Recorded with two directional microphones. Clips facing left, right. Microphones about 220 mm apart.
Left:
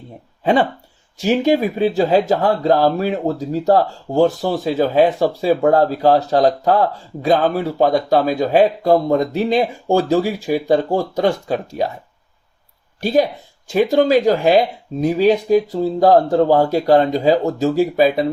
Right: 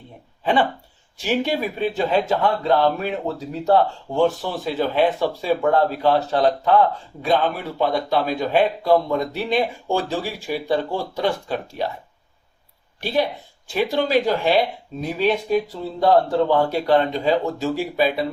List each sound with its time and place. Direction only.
1.2 s speech: 40° left (ahead or behind)
13.0 s speech: 40° left (ahead or behind)